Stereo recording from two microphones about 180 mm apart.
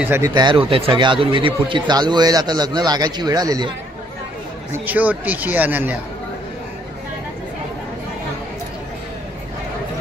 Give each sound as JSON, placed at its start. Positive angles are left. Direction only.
{"t": 0.0, "sound": "speech", "side_deg": -15}
{"t": 0.3, "sound": "speech", "side_deg": -25}
{"t": 4.7, "sound": "speech", "side_deg": -10}